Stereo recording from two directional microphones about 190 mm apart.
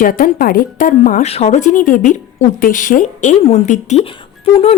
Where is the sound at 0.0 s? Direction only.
50° left (ahead or behind).